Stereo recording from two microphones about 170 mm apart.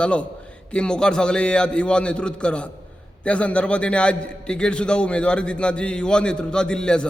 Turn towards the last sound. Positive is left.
turn(degrees=5)  # may be behind; listen again after turning